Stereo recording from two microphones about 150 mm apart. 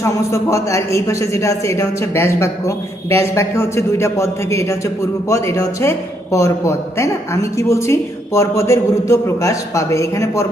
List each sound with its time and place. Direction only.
0.0 s a man's voice: 20° left (ahead or behind)